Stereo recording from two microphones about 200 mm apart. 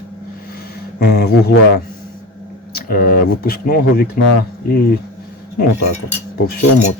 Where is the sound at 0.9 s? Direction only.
55° left (ahead or behind).